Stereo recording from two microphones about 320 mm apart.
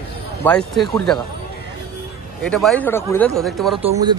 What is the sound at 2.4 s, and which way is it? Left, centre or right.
Speech, centre.